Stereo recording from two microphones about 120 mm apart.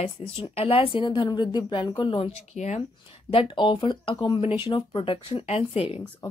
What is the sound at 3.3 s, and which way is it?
A woman's voice, 45° left (ahead or behind).